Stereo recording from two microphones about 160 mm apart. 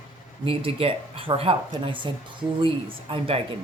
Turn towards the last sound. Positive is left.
turn(degrees=-35)  # may be behind; listen again after turning